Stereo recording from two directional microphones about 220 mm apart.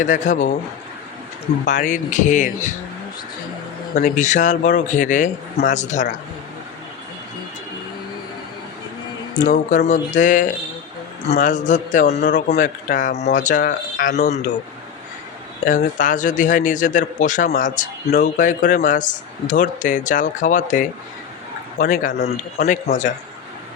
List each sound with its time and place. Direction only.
0.0 s a man's voice: 35° left (ahead or behind)
1.6 s a man's voice: 35° left (ahead or behind)
3.9 s a man's voice: 35° left (ahead or behind)
9.4 s a man's voice: 35° left (ahead or behind)
15.6 s a man's voice: 35° left (ahead or behind)